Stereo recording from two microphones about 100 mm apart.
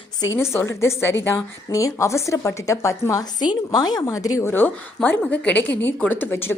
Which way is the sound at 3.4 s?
40° left (ahead or behind).